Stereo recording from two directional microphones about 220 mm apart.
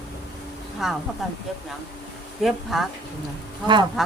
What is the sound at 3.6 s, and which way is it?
Speech, 20° right (ahead or behind).